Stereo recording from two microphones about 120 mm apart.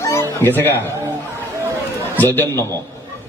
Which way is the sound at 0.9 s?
25° right (ahead or behind).